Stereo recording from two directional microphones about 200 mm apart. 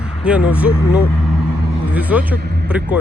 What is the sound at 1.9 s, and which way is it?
Speech, 10° right (ahead or behind).